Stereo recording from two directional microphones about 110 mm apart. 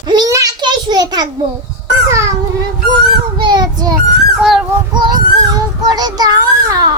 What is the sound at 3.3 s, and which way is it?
Speech, 40° right (ahead or behind).